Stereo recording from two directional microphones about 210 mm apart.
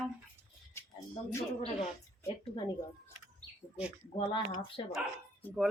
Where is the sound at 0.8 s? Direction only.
10° left (ahead or behind).